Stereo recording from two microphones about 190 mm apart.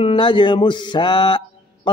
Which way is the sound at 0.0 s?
25° left (ahead or behind).